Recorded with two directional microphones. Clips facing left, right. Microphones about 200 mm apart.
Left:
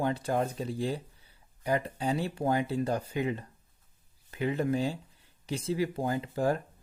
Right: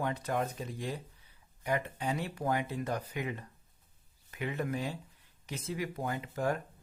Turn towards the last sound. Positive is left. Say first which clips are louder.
# left 4 dB
turn(degrees=30)  # may be behind; listen again after turning